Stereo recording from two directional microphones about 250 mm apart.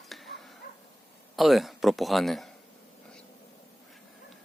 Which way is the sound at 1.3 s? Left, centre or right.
Centre.